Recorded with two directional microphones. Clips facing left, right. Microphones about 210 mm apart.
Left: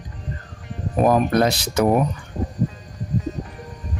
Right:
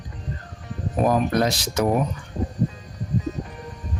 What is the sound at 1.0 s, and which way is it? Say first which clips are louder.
Speech: left 3 dB; 60° left (ahead or behind).